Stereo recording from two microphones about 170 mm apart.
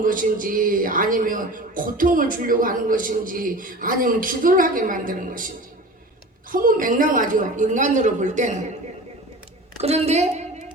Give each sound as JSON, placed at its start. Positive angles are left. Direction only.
{"t": 0.0, "sound": "a man's voice", "side_deg": -55}
{"t": 6.5, "sound": "a man's voice", "side_deg": -55}
{"t": 9.8, "sound": "a woman's voice", "side_deg": -40}